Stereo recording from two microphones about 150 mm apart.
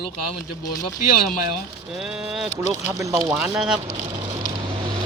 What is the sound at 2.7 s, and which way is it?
Speech, 20° right (ahead or behind).